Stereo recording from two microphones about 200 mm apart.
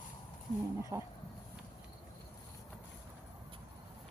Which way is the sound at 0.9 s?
15° right (ahead or behind).